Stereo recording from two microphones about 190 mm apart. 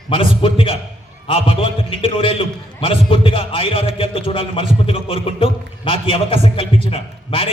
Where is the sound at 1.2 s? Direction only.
30° left (ahead or behind).